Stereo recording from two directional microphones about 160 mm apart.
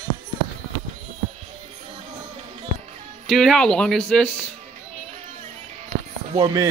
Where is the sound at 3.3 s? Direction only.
Centre (ahead or behind).